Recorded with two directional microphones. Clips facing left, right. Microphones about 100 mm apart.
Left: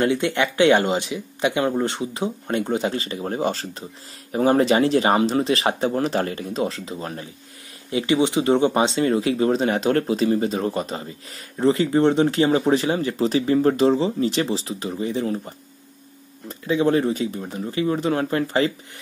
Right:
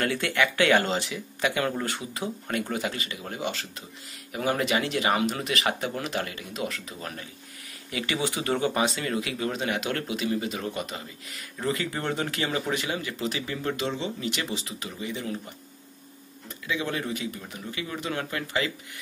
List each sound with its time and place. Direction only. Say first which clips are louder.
0.0 s speech: left 5 dB; 20° left (ahead or behind)